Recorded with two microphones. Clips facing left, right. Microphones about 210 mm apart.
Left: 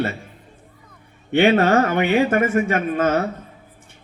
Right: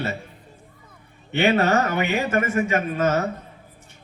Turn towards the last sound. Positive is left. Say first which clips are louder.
# left 2 dB
turn(degrees=50)  # may be behind; listen again after turning